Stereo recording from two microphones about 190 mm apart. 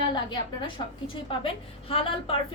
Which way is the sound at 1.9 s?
30° left (ahead or behind).